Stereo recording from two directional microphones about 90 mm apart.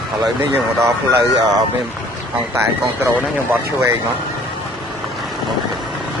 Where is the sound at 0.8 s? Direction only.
35° right (ahead or behind).